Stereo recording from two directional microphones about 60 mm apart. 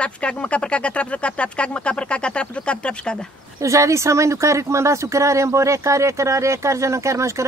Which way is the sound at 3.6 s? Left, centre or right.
Right.